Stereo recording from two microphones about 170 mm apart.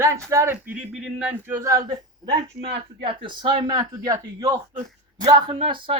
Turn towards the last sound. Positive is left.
turn(degrees=-30)  # may be behind; listen again after turning